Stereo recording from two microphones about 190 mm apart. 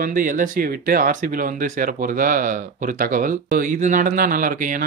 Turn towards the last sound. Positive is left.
turn(degrees=-45)  # may be behind; listen again after turning